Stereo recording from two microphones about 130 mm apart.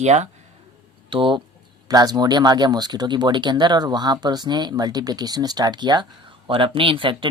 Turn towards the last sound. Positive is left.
turn(degrees=-40)  # may be behind; listen again after turning